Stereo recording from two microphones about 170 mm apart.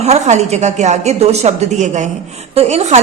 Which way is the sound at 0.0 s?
40° right (ahead or behind).